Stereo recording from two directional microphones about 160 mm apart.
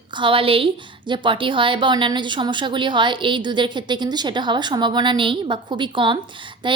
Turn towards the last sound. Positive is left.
turn(degrees=-30)  # may be behind; listen again after turning